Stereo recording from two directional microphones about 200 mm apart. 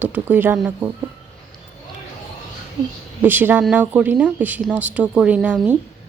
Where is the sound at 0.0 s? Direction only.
10° right (ahead or behind).